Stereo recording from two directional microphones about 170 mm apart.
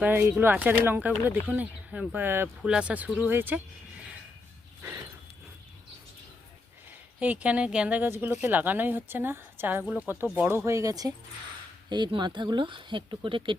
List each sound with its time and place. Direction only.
0.0 s speech: 10° right (ahead or behind)
7.2 s speech: 10° right (ahead or behind); by 13.6 s 30° right (ahead or behind)